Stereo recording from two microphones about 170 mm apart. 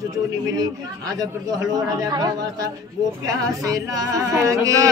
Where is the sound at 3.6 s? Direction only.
20° right (ahead or behind).